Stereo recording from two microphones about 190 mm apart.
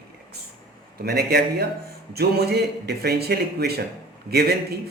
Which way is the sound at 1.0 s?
55° right (ahead or behind).